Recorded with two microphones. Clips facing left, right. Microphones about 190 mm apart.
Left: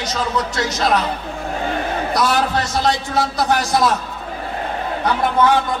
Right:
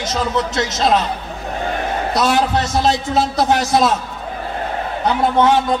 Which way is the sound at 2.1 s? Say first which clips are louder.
Right 2 dB; 20° right (ahead or behind).